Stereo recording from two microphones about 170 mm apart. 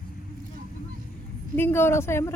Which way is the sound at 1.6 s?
15° left (ahead or behind).